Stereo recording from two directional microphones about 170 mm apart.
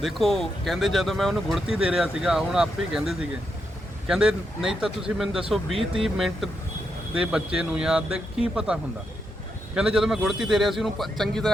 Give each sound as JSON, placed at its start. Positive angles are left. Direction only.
{"t": 0.0, "sound": "a man's voice", "side_deg": 0}